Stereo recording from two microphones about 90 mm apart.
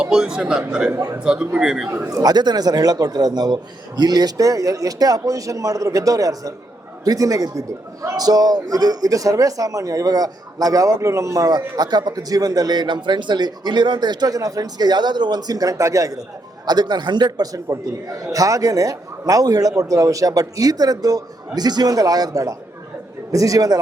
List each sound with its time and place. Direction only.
0.0 s a man's voice: 10° right (ahead or behind)
0.9 s a man's voice: 35° right (ahead or behind)
1.2 s a man's voice: 10° right (ahead or behind)
2.0 s a man's voice: 45° right (ahead or behind)